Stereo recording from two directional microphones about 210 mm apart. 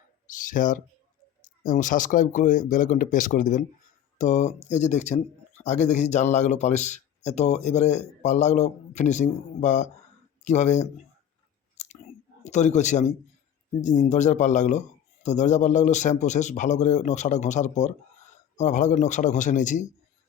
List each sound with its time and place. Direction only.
0.3 s speech: 40° left (ahead or behind)
11.8 s chewing: 35° left (ahead or behind)
12.5 s speech: 35° left (ahead or behind)